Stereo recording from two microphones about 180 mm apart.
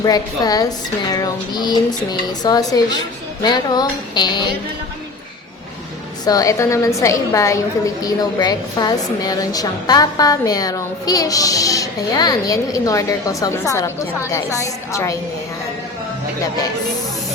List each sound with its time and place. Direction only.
0.0 s a woman's voice: 20° left (ahead or behind)
6.2 s a woman's voice: 20° left (ahead or behind)
16.4 s a woman's voice: 20° left (ahead or behind)